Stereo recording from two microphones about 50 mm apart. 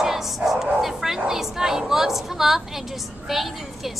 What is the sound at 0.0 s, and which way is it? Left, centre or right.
Bow-wow, centre.